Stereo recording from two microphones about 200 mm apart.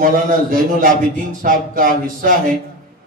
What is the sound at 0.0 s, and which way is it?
A man's voice, 45° right (ahead or behind).